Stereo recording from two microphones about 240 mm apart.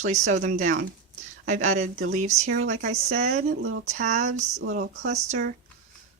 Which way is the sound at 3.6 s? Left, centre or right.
Right.